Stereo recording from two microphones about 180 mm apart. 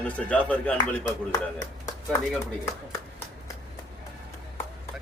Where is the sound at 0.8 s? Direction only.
20° left (ahead or behind).